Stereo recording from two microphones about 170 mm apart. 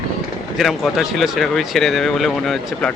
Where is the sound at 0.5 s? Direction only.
Centre (ahead or behind).